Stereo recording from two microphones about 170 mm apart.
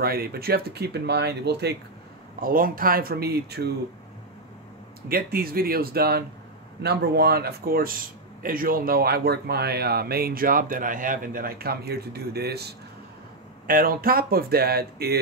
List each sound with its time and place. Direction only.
0.0 s speech: 65° right (ahead or behind)
2.4 s speech: 55° right (ahead or behind); by 3.7 s 70° right (ahead or behind)
5.0 s speech: 60° right (ahead or behind)
13.7 s speech: 55° right (ahead or behind)